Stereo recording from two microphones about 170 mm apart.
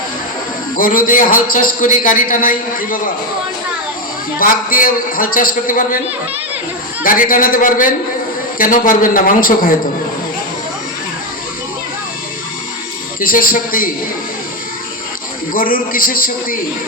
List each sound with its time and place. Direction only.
0.8 s a man's voice: 55° left (ahead or behind)
4.4 s a man's voice: 55° left (ahead or behind)
7.0 s a man's voice: 55° left (ahead or behind)
13.1 s a man's voice: 55° left (ahead or behind)
15.5 s a man's voice: 55° left (ahead or behind)